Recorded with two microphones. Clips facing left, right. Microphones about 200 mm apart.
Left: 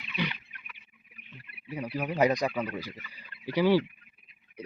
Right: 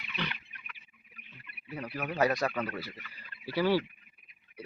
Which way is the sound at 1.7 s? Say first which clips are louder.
Left 4 dB; 15° left (ahead or behind).